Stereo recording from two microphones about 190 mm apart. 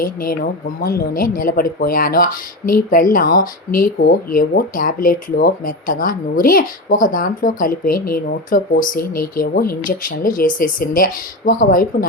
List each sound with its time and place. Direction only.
0.0 s speech: 45° left (ahead or behind)